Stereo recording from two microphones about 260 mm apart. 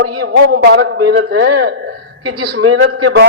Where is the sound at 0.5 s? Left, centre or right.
Right.